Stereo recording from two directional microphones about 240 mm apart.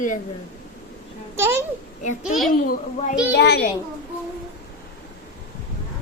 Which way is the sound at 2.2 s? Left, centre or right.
Centre.